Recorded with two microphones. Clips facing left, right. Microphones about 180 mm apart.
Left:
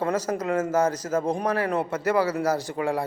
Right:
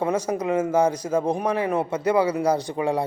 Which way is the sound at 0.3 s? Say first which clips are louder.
Right 2 dB; 10° right (ahead or behind).